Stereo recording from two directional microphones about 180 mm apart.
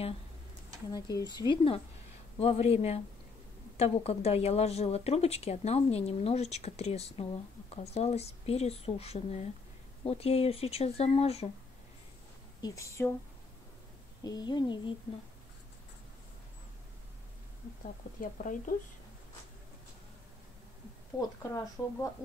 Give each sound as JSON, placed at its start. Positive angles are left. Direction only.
{"t": 0.9, "sound": "speech", "side_deg": 20}
{"t": 12.6, "sound": "speech", "side_deg": 15}
{"t": 14.2, "sound": "speech", "side_deg": 20}
{"t": 18.2, "sound": "speech", "side_deg": 50}
{"t": 21.4, "sound": "speech", "side_deg": 15}